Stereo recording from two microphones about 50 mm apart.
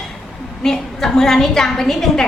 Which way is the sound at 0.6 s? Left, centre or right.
Centre.